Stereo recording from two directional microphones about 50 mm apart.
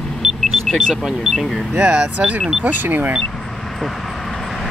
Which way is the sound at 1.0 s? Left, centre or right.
Centre.